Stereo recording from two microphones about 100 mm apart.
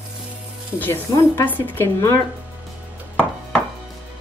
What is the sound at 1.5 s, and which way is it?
Speech, 20° left (ahead or behind).